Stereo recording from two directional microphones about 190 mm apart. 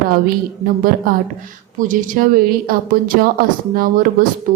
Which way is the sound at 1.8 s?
45° right (ahead or behind).